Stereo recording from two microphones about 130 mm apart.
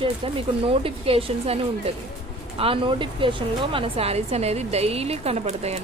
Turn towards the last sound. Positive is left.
turn(degrees=-55)  # may be behind; listen again after turning